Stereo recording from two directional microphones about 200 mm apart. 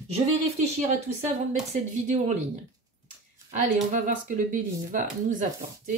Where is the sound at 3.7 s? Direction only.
40° right (ahead or behind).